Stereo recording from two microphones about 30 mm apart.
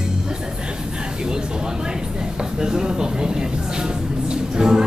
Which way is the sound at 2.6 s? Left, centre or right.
Right.